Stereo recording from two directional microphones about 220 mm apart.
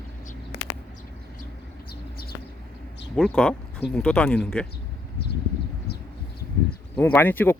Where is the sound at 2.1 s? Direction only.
45° left (ahead or behind).